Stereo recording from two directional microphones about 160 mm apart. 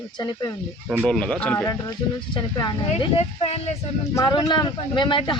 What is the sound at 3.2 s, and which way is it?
Speech, 40° left (ahead or behind).